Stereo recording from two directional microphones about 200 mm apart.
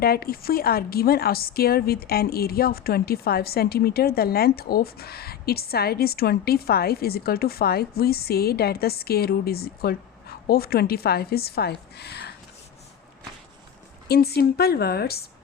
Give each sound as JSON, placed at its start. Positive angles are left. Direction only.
{"t": 0.0, "sound": "a woman's voice", "side_deg": 50}
{"t": 14.1, "sound": "a woman's voice", "side_deg": 50}